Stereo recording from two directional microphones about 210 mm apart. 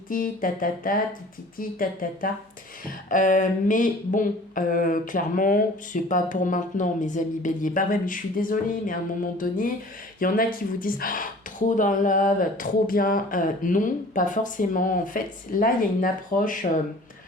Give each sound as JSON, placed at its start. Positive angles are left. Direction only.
{"t": 0.1, "sound": "speech", "side_deg": 40}